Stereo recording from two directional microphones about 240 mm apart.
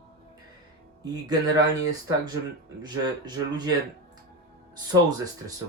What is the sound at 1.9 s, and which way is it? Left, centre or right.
Speech, centre.